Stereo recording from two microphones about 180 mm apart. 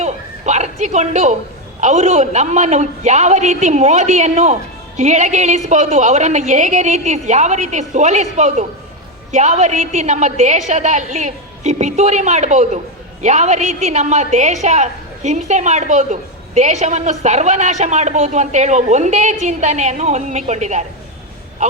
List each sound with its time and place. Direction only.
0.0 s a woman's voice: 40° right (ahead or behind)